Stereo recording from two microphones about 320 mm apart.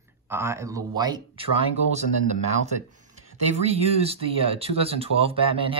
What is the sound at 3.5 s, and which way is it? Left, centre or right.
Speech, centre.